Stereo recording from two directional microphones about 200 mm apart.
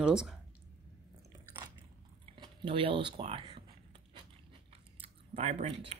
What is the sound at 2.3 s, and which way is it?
Speech, 25° right (ahead or behind).